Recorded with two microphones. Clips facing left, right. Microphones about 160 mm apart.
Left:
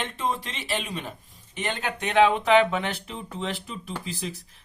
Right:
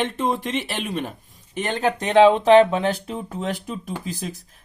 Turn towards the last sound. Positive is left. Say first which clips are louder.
# right 3 dB
turn(degrees=-40)  # may be behind; listen again after turning